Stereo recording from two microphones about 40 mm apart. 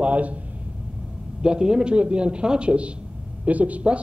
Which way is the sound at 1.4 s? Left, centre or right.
Right.